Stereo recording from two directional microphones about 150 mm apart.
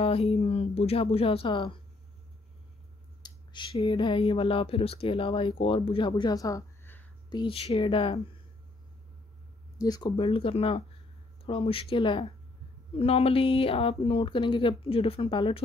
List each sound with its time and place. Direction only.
0.0 s speech: 40° left (ahead or behind)
3.2 s speech: 30° left (ahead or behind); by 7.1 s 15° left (ahead or behind)
7.2 s speech: 35° left (ahead or behind)
9.8 s speech: 25° left (ahead or behind)